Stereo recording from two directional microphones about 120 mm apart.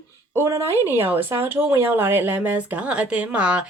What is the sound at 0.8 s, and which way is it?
Speech, 15° right (ahead or behind).